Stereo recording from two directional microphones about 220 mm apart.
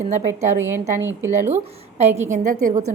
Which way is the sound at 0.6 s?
10° right (ahead or behind).